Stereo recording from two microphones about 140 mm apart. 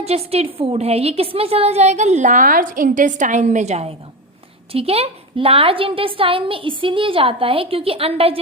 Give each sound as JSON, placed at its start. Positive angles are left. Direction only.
{"t": 0.0, "sound": "a woman's voice", "side_deg": -45}